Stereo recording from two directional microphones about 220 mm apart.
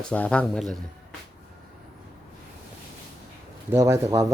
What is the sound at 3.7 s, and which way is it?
Speech, 15° right (ahead or behind).